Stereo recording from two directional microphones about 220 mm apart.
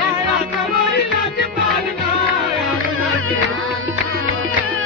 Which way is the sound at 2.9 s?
70° right (ahead or behind).